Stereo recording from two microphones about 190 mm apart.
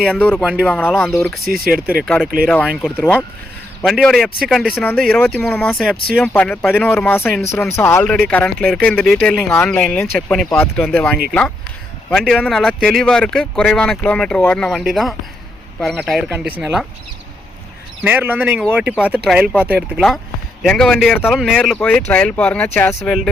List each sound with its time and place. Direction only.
0.1 s speech: 10° left (ahead or behind)
1.5 s speech: 50° right (ahead or behind)
2.6 s speech: centre (ahead or behind)
2.9 s speech: 10° left (ahead or behind)
3.8 s speech: centre (ahead or behind)
18.0 s speech: 10° right (ahead or behind)